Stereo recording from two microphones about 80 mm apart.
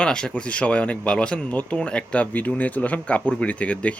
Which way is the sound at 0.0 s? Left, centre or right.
Centre.